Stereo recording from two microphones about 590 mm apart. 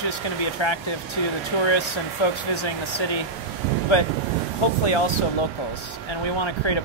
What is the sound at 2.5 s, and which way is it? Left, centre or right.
Speech, left.